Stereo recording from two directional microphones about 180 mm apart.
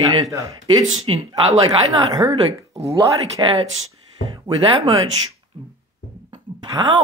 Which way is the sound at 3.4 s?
20° right (ahead or behind).